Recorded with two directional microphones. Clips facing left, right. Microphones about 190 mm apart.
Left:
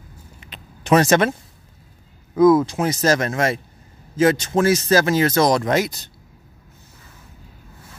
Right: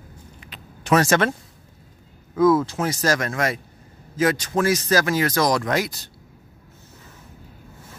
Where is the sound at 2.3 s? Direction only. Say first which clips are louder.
Left 4 dB; 15° left (ahead or behind).